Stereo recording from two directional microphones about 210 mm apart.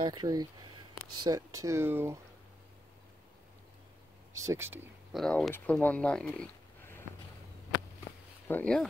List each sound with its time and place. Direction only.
0.0 s speech: 20° right (ahead or behind)
4.4 s speech: 15° right (ahead or behind)
5.1 s speech: centre (ahead or behind)
8.5 s speech: 5° left (ahead or behind)